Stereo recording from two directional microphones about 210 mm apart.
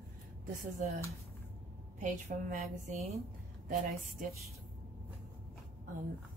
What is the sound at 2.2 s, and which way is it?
Speech, 35° right (ahead or behind).